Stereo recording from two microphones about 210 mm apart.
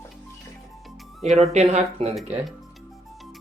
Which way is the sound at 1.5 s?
30° right (ahead or behind).